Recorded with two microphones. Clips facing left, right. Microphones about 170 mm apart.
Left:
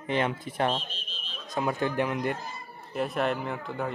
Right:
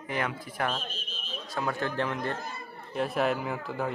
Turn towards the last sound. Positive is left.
turn(degrees=0)  # may be behind; listen again after turning